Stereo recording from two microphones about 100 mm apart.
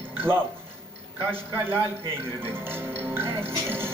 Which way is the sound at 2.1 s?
20° right (ahead or behind).